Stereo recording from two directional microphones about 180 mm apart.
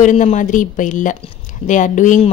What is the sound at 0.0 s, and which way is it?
Speech, 40° left (ahead or behind).